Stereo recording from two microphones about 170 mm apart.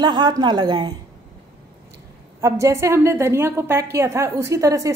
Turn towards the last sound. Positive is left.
turn(degrees=-20)  # may be behind; listen again after turning